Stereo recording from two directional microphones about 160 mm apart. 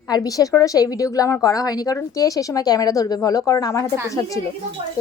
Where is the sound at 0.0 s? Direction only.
25° left (ahead or behind).